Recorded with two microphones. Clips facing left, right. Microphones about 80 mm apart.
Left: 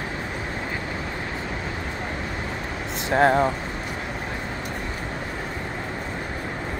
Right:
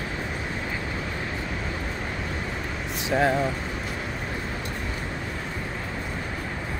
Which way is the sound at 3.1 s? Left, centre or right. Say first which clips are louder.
Left 4 dB; left.